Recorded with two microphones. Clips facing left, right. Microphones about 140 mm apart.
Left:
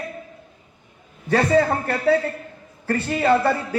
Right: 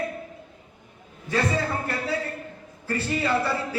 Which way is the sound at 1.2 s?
55° left (ahead or behind).